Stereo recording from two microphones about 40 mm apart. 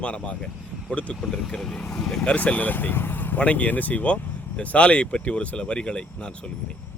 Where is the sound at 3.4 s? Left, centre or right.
Left.